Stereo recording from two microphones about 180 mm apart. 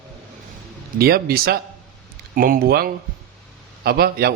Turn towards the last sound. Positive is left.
turn(degrees=-60)  # may be behind; listen again after turning